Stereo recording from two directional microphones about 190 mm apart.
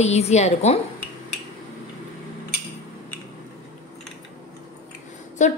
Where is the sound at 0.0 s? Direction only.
35° left (ahead or behind).